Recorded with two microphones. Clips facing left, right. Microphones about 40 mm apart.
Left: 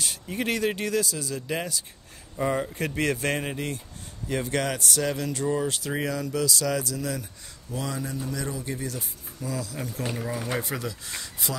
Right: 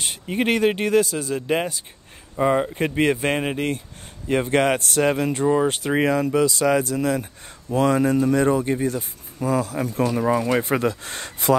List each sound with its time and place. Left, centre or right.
0.0 s speech: right